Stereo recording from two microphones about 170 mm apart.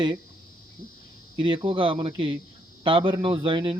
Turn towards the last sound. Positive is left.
turn(degrees=-30)  # may be behind; listen again after turning